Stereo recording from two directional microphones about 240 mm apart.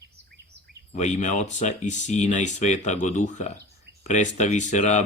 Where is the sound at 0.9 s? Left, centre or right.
Left.